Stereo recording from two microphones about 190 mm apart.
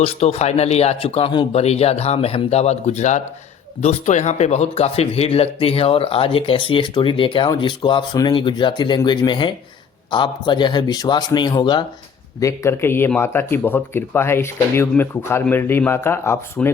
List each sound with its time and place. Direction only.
0.0 s speech: 30° left (ahead or behind); by 16.7 s 15° left (ahead or behind)